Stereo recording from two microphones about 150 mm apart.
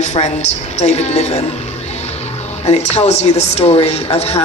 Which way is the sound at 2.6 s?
45° left (ahead or behind).